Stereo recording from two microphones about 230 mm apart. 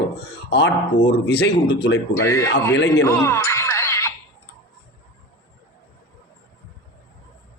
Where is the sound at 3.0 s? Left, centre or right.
Centre.